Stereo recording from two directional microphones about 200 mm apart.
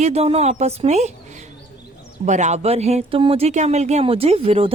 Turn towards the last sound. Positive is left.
turn(degrees=-30)  # may be behind; listen again after turning